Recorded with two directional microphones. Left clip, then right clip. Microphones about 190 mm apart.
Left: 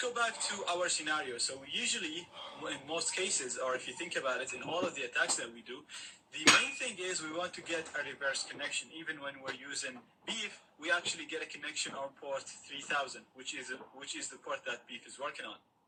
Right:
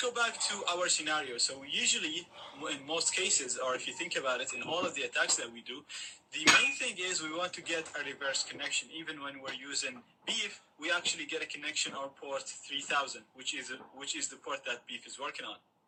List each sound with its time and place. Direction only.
0.0 s a man's voice: 35° right (ahead or behind)
6.7 s a man's voice: 30° right (ahead or behind)